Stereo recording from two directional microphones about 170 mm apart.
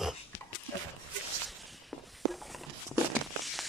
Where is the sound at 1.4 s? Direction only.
Centre (ahead or behind).